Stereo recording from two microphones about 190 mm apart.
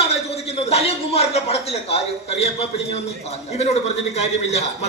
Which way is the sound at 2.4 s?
30° left (ahead or behind).